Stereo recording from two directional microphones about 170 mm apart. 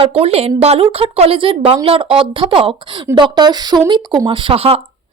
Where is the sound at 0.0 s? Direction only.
35° right (ahead or behind).